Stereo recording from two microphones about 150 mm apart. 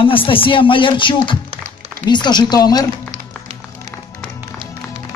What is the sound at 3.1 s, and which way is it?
Music, 55° right (ahead or behind).